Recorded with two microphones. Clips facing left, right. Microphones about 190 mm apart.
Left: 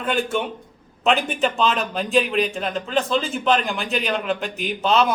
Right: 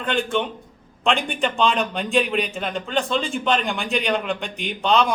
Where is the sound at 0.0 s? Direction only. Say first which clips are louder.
Even; 5° left (ahead or behind).